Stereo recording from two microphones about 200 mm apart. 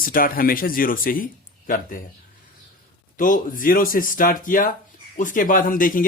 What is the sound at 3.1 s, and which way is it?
Speech, 40° left (ahead or behind).